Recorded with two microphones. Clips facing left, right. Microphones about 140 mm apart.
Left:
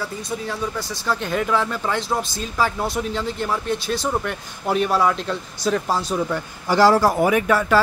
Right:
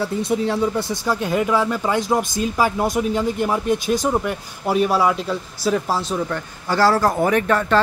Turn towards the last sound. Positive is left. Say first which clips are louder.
# even
turn(degrees=5)  # may be behind; listen again after turning